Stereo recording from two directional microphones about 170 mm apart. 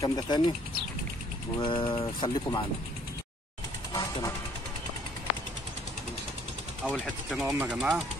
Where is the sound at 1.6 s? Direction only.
30° left (ahead or behind).